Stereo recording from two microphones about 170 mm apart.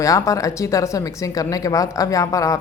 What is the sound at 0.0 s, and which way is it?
Speech, 20° left (ahead or behind).